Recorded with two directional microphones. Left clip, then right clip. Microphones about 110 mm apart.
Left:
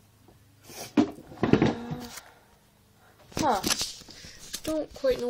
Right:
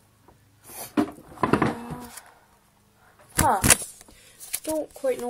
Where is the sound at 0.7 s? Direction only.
55° left (ahead or behind).